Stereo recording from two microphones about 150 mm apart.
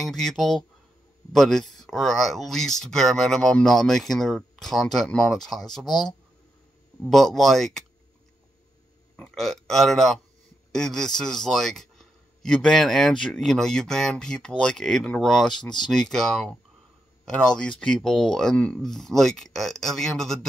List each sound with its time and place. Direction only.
0.0 s a man's voice: 5° left (ahead or behind)
9.1 s a man's voice: 5° left (ahead or behind)